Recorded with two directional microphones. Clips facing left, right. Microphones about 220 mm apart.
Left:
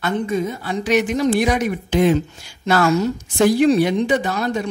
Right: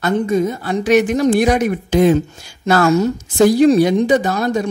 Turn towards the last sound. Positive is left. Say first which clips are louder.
# right 4 dB
turn(degrees=-45)  # may be behind; listen again after turning